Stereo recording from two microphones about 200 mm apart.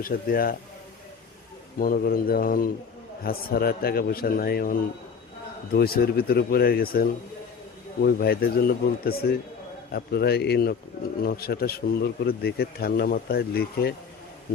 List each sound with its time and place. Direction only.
0.0 s speech: 45° left (ahead or behind)
1.8 s speech: 45° left (ahead or behind)